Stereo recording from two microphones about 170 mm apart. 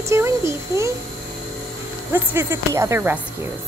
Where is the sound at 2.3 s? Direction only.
15° right (ahead or behind).